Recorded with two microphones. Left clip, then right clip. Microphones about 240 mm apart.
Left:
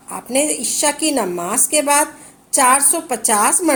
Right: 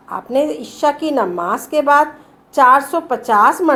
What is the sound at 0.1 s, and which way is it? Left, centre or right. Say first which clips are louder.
A woman's voice: right 3 dB; left.